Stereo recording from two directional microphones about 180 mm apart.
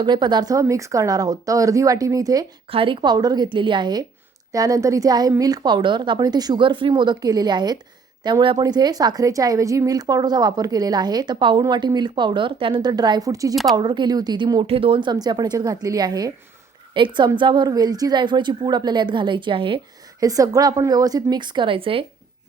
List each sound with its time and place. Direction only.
0.0 s a woman's voice: 25° right (ahead or behind)